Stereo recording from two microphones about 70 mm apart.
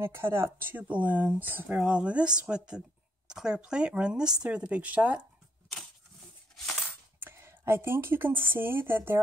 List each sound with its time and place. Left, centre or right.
0.0 s speech: right
6.5 s a sound: centre
7.2 s speech: right